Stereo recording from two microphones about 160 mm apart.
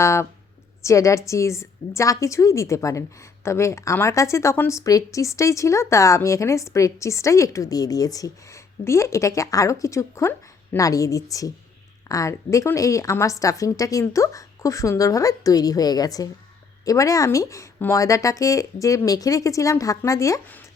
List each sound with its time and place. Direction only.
0.0 s speech: 15° left (ahead or behind)